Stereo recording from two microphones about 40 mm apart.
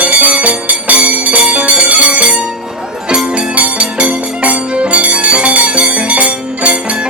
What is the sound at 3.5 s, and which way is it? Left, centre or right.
Music, right.